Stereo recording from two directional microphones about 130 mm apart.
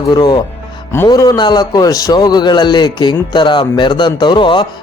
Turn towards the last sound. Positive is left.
turn(degrees=40)  # may be behind; listen again after turning